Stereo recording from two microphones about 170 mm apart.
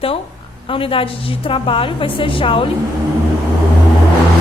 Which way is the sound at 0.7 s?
30° left (ahead or behind).